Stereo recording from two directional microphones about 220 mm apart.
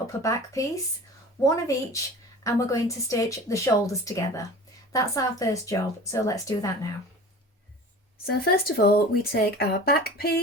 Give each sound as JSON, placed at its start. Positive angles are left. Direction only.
{"t": 0.2, "sound": "speech", "side_deg": 15}
{"t": 8.3, "sound": "speech", "side_deg": 45}